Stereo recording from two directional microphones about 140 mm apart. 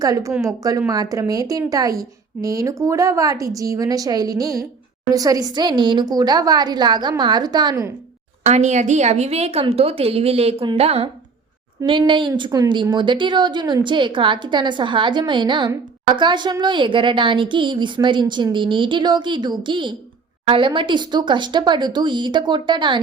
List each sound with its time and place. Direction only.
0.0 s a woman's voice: 25° right (ahead or behind)
8.4 s a woman's voice: 55° right (ahead or behind); by 23.0 s 35° right (ahead or behind)